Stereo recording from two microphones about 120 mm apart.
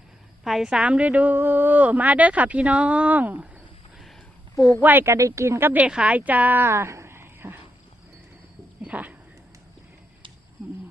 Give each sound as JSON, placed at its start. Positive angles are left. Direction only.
{"t": 0.4, "sound": "a woman's voice", "side_deg": -5}
{"t": 4.5, "sound": "speech", "side_deg": 25}
{"t": 4.8, "sound": "speech", "side_deg": -15}
{"t": 8.8, "sound": "a sound", "side_deg": -10}